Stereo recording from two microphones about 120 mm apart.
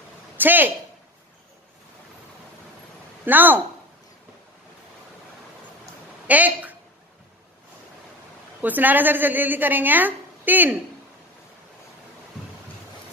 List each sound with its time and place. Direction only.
0.4 s a woman's voice: 15° right (ahead or behind)
3.3 s a woman's voice: 15° right (ahead or behind)
6.2 s a woman's voice: 15° right (ahead or behind)
8.5 s a woman's voice: 15° right (ahead or behind)